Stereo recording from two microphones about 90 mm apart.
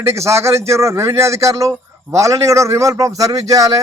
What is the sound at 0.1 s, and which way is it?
A man's voice, 30° right (ahead or behind).